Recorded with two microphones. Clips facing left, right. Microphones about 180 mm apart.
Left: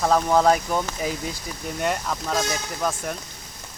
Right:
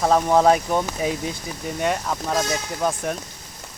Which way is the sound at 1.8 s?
5° right (ahead or behind).